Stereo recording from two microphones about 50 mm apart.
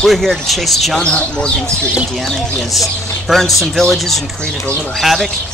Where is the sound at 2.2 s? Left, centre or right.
Centre.